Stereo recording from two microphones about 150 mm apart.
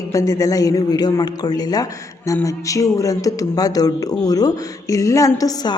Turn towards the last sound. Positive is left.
turn(degrees=25)  # may be behind; listen again after turning